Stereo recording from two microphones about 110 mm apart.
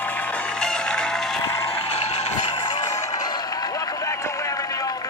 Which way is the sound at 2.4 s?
50° left (ahead or behind).